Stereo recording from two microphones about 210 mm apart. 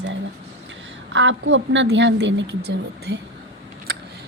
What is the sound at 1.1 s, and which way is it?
A woman's voice, 60° right (ahead or behind).